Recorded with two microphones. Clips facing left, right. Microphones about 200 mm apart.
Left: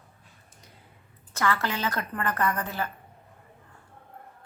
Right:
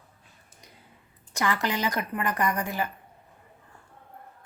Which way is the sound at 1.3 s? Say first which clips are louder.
Even; 15° right (ahead or behind).